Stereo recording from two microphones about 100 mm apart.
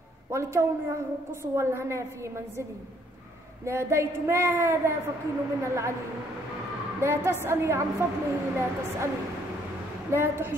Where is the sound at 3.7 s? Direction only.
25° right (ahead or behind).